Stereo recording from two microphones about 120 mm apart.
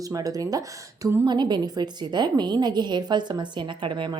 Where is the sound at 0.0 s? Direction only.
30° right (ahead or behind).